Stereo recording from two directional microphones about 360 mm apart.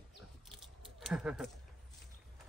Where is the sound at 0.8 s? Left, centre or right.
Centre.